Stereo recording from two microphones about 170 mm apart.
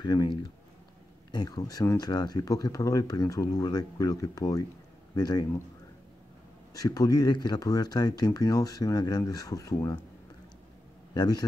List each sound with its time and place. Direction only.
0.0 s speech: 25° left (ahead or behind)
6.7 s speech: 20° left (ahead or behind)
11.1 s speech: 25° left (ahead or behind)